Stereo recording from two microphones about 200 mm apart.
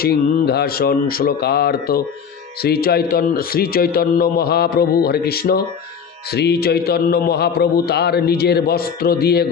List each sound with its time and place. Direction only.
0.0 s a man's voice: 50° left (ahead or behind)